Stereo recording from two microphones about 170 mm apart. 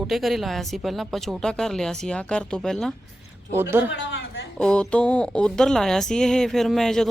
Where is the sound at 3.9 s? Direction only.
90° left.